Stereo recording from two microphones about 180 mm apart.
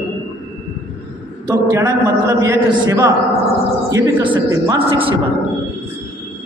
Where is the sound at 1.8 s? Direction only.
20° right (ahead or behind).